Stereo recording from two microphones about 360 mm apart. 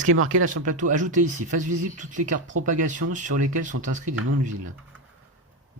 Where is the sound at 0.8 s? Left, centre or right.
Right.